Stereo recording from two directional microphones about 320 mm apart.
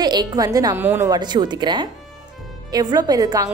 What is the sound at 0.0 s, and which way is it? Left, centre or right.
A woman's voice, centre.